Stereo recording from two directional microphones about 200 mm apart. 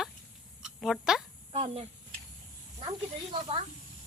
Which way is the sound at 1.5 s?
30° right (ahead or behind).